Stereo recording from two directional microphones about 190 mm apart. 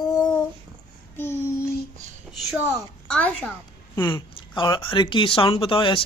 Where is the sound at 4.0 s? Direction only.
25° left (ahead or behind).